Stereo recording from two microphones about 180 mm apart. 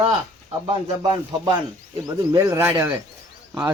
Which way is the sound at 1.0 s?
25° right (ahead or behind).